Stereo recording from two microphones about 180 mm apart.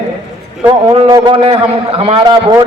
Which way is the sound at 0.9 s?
30° right (ahead or behind).